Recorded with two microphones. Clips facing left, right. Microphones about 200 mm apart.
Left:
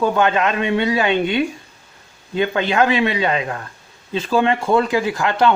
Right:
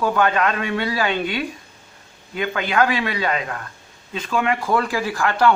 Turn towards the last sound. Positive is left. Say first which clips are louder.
# left 2 dB
turn(degrees=20)  # may be behind; listen again after turning